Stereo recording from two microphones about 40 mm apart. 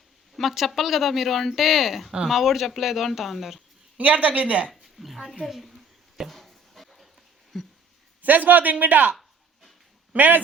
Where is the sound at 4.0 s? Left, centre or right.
Right.